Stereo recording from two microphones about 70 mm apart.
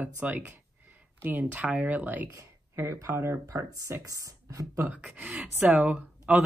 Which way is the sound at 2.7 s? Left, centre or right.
Right.